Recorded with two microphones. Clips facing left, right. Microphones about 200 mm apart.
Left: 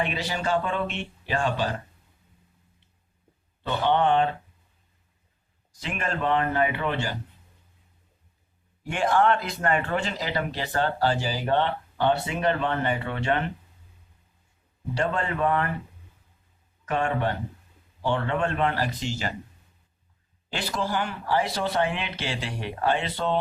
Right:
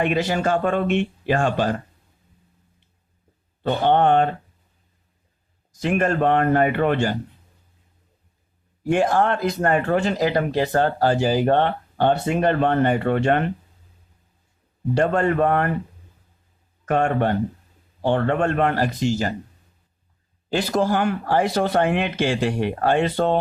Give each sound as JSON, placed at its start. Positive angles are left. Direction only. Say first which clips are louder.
{"t": 0.0, "sound": "speech", "louder": "right 7 dB", "side_deg": -50}
{"t": 3.6, "sound": "speech", "louder": "right 5 dB", "side_deg": -50}
{"t": 5.8, "sound": "speech", "louder": "right 9 dB", "side_deg": -50}
{"t": 8.8, "sound": "speech", "louder": "right 4 dB", "side_deg": -40}
{"t": 14.9, "sound": "speech", "louder": "right 8 dB", "side_deg": -50}
{"t": 16.8, "sound": "speech", "louder": "right 6 dB", "side_deg": -50}
{"t": 20.5, "sound": "speech", "louder": "right 8 dB", "side_deg": -45}